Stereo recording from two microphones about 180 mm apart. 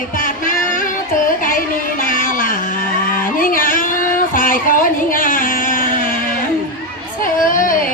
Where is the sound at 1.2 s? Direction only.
50° left (ahead or behind).